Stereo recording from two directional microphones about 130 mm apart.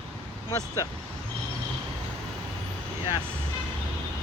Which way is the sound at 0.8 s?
30° left (ahead or behind).